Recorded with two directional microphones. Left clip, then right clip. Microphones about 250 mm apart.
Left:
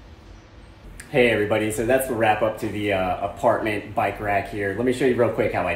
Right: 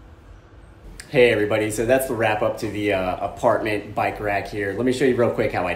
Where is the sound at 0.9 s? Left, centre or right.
Centre.